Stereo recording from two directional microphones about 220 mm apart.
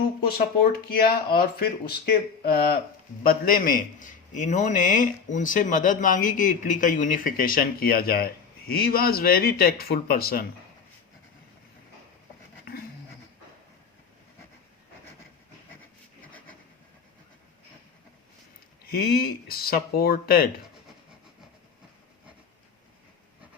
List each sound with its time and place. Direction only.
0.3 s a man's voice: 45° left (ahead or behind)
18.9 s speech: 45° left (ahead or behind)